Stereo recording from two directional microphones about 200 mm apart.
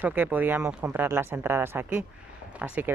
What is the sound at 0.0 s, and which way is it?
Speech, 10° right (ahead or behind).